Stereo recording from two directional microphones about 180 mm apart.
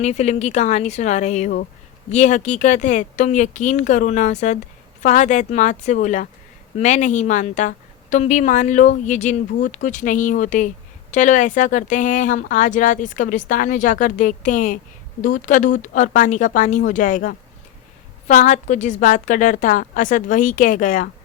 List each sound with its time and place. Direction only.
0.0 s speech: 40° left (ahead or behind)